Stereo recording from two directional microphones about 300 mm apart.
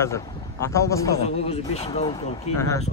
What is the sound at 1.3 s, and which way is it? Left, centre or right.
Speech, centre.